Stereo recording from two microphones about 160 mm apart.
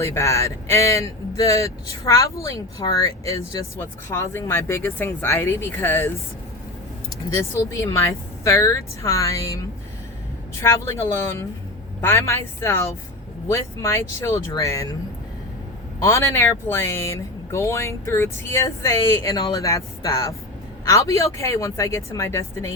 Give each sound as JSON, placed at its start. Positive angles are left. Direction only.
{"t": 0.0, "sound": "speech", "side_deg": 20}
{"t": 7.3, "sound": "a woman's voice", "side_deg": 20}
{"t": 10.6, "sound": "a woman's voice", "side_deg": 15}
{"t": 16.0, "sound": "a woman's voice", "side_deg": 15}